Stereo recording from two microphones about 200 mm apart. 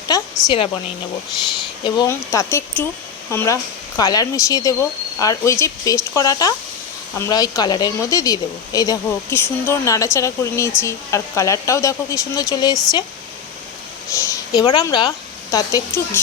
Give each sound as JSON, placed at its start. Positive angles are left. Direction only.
{"t": 0.1, "sound": "speech", "side_deg": 15}
{"t": 1.8, "sound": "speech", "side_deg": 20}
{"t": 14.3, "sound": "speech", "side_deg": 20}